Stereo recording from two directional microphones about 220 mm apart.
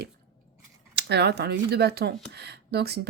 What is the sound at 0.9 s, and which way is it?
Speech, 50° right (ahead or behind).